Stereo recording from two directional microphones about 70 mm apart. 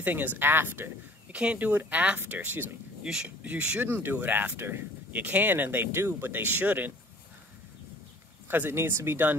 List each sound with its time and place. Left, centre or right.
0.0 s speech: right
1.3 s speech: centre
3.0 s speech: centre
3.8 s speech: right
5.1 s speech: right
8.5 s speech: right